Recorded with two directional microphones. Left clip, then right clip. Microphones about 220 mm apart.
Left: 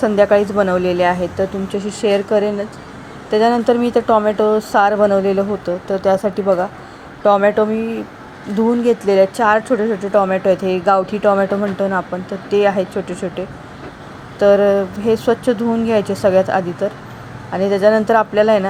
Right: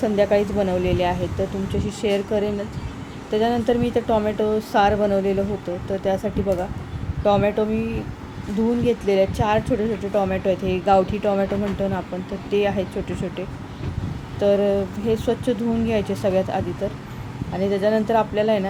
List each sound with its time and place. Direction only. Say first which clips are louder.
0.0 s speech: left 6 dB; 10° left (ahead or behind)
8.8 s speech: left 6 dB; 10° left (ahead or behind)